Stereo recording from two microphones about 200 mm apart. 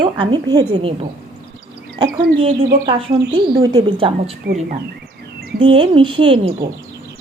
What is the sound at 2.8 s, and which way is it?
Speech, 25° right (ahead or behind).